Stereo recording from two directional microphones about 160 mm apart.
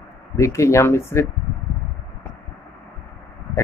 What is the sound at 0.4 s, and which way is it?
Speech, 20° left (ahead or behind).